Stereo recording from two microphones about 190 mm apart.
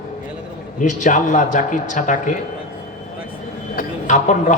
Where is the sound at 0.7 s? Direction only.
40° left (ahead or behind).